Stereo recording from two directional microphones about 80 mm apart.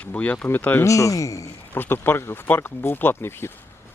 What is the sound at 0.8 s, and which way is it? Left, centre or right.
Speech, left.